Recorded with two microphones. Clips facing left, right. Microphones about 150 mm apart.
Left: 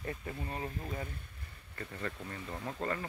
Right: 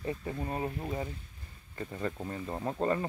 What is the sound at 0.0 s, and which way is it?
Speech, 20° right (ahead or behind).